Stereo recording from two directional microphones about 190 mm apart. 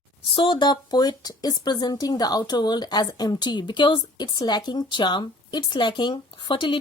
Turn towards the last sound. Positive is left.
turn(degrees=25)  # may be behind; listen again after turning